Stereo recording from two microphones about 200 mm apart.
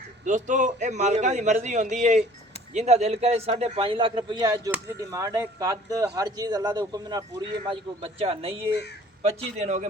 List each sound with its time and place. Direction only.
0.3 s a man's voice: 40° right (ahead or behind)